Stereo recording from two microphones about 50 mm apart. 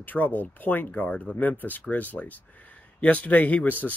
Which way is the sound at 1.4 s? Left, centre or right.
Left.